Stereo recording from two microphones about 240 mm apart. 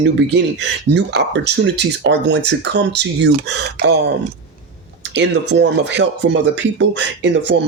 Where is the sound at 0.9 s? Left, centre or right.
Right.